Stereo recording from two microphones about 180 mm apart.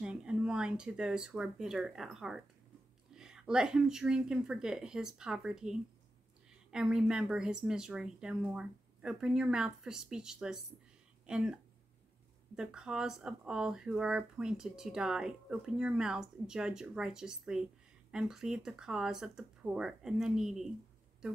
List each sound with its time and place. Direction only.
0.0 s speech: 5° right (ahead or behind)